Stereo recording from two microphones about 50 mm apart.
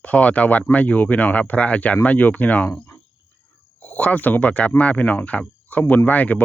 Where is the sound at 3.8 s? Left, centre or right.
Left.